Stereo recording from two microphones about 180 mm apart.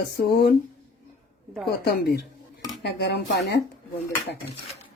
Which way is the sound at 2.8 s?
65° left (ahead or behind).